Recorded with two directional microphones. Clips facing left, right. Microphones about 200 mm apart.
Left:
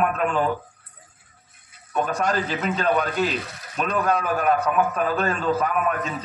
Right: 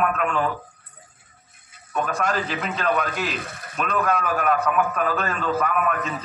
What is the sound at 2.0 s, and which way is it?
A man's voice, 40° left (ahead or behind).